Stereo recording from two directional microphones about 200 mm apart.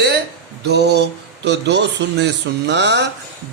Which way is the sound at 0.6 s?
55° right (ahead or behind).